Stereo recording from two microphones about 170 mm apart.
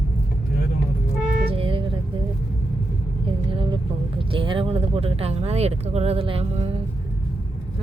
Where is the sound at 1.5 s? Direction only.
30° right (ahead or behind).